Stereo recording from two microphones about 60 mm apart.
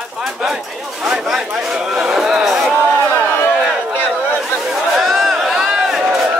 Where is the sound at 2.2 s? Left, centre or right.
Centre.